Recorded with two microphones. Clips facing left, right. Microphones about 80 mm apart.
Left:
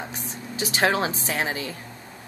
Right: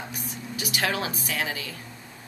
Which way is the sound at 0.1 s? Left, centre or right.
Left.